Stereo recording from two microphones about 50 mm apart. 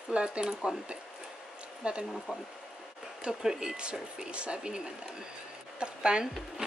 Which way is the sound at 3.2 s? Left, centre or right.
Centre.